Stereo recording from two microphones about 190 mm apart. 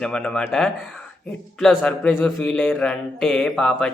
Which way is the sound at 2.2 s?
5° left (ahead or behind).